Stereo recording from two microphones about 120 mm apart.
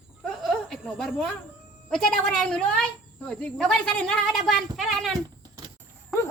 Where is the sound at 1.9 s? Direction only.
5° left (ahead or behind).